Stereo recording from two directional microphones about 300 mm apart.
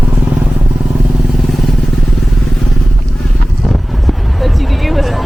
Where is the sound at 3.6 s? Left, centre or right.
Centre.